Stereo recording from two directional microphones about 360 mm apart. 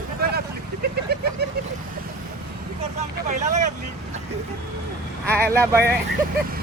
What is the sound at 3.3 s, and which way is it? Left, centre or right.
Speech, centre.